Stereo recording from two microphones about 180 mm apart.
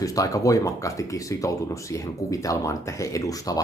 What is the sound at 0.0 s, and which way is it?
Speech, 20° left (ahead or behind).